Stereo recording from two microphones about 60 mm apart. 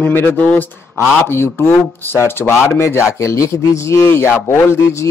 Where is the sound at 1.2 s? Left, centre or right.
Left.